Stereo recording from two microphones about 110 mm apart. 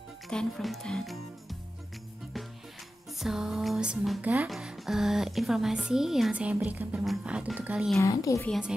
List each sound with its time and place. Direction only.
0.3 s a woman's voice: 5° left (ahead or behind)
3.2 s a woman's voice: 5° right (ahead or behind)
8.0 s a woman's voice: 30° left (ahead or behind)